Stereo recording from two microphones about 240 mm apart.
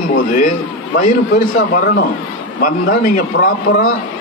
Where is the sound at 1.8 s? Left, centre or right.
Left.